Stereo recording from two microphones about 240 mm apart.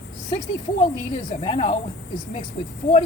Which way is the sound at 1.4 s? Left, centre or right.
Left.